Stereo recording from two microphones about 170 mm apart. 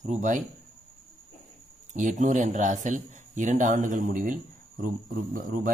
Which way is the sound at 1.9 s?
45° right (ahead or behind).